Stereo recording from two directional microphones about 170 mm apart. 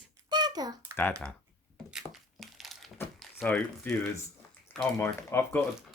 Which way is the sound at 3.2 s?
5° left (ahead or behind).